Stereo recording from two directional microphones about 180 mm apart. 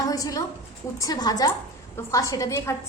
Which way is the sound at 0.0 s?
20° left (ahead or behind).